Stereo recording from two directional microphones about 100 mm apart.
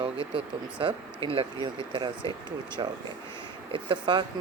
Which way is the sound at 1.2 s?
70° right (ahead or behind).